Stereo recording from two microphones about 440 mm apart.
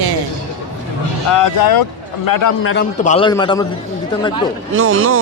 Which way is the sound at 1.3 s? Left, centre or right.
Left.